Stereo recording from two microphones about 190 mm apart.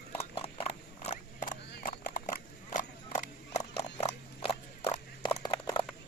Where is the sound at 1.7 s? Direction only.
45° left (ahead or behind).